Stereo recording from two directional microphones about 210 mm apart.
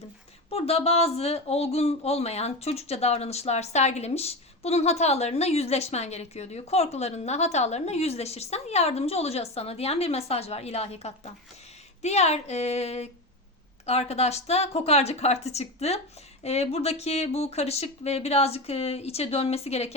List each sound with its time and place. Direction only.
0.5 s speech: 30° left (ahead or behind)